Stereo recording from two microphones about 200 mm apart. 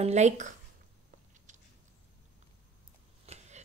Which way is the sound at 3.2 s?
35° right (ahead or behind).